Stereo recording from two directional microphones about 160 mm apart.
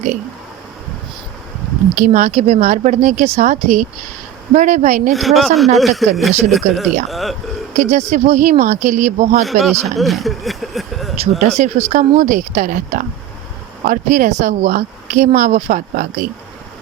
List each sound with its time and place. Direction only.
2.0 s speech: 50° right (ahead or behind)
5.1 s speech: centre (ahead or behind)
7.8 s speech: 45° right (ahead or behind)
9.4 s speech: centre (ahead or behind)
10.0 s a sound: centre (ahead or behind)
11.2 s speech: 40° right (ahead or behind)